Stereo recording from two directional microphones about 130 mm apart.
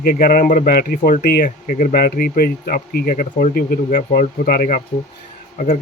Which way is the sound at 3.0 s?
90° left.